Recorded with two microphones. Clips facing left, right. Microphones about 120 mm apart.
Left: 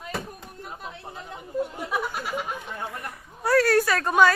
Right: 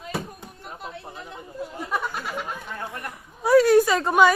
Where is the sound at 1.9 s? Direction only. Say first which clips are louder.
Even; 10° left (ahead or behind).